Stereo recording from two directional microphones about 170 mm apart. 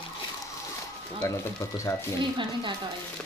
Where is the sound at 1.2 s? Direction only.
15° left (ahead or behind).